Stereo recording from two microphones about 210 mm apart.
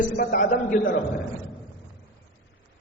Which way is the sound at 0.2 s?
40° left (ahead or behind).